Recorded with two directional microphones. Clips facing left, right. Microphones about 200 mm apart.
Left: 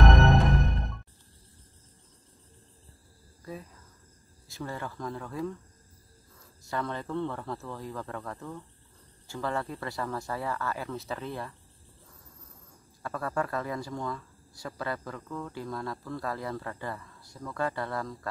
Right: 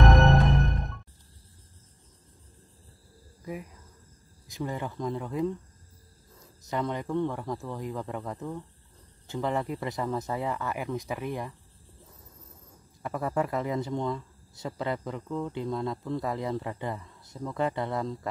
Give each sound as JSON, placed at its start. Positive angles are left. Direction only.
{"t": 3.5, "sound": "speech", "side_deg": -15}
{"t": 13.0, "sound": "speech", "side_deg": -20}